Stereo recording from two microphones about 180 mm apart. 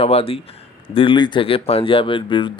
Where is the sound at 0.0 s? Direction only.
35° left (ahead or behind).